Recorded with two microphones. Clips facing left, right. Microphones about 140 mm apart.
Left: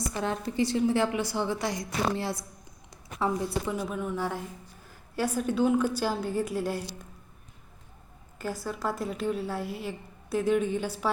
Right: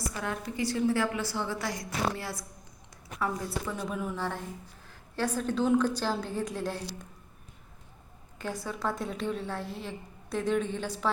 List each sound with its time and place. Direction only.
0.1 s a woman's voice: 25° left (ahead or behind)
3.8 s a woman's voice: centre (ahead or behind)
8.4 s a woman's voice: 5° left (ahead or behind)